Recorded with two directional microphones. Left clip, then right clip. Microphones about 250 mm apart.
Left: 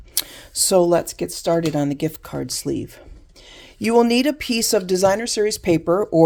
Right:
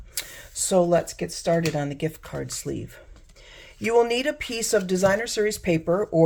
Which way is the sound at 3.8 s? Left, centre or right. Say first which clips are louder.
Left 4 dB; left.